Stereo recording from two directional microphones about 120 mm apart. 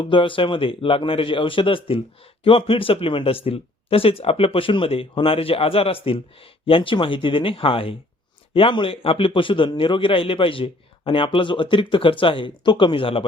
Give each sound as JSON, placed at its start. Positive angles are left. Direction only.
{"t": 0.0, "sound": "speech", "side_deg": 45}